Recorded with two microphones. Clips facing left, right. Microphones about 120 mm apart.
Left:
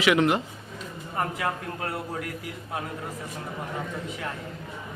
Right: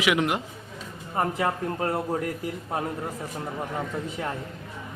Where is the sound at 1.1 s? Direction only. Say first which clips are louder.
Right 3 dB; 25° right (ahead or behind).